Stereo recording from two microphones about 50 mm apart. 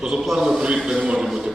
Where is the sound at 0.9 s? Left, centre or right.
Centre.